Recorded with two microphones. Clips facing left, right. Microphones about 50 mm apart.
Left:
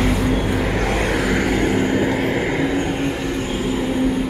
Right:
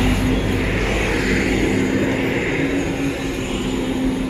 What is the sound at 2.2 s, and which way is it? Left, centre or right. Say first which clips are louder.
Vehicle: even; right.